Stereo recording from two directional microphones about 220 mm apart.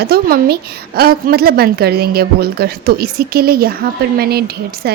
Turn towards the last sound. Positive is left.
turn(degrees=-45)  # may be behind; listen again after turning